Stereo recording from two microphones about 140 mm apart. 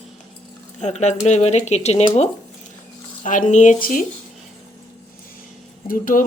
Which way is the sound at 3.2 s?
65° left (ahead or behind).